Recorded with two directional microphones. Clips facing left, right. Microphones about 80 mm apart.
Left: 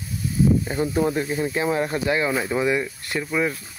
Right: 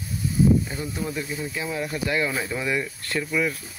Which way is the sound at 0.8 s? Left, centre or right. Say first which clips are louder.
Left 8 dB; left.